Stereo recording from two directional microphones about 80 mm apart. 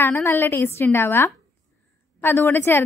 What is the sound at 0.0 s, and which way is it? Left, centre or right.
A woman's voice, left.